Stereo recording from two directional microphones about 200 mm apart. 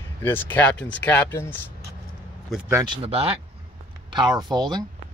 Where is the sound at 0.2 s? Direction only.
10° left (ahead or behind).